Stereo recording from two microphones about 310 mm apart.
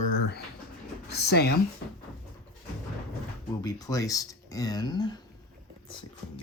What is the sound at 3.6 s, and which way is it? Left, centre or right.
Speech, centre.